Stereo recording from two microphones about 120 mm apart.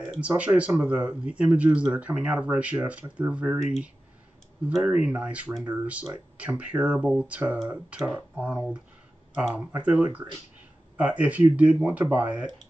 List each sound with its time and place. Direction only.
0.2 s speech: 10° right (ahead or behind)
4.7 s speech: 10° right (ahead or behind)